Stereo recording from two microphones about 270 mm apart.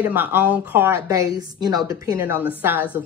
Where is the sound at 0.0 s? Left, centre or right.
Centre.